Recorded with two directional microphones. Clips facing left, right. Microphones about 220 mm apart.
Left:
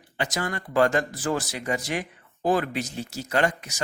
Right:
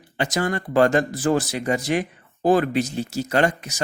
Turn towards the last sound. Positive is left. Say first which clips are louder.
# right 4 dB
turn(degrees=-30)  # may be behind; listen again after turning